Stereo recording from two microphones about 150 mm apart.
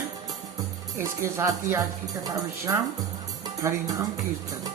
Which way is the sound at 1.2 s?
15° right (ahead or behind).